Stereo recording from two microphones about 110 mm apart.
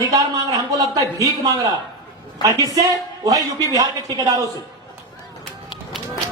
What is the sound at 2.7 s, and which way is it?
Speech, 35° right (ahead or behind).